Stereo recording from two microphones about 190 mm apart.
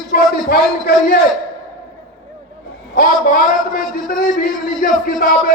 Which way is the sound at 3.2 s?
50° left (ahead or behind).